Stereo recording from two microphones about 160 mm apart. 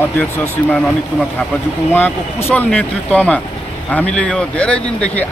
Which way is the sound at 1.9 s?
15° left (ahead or behind).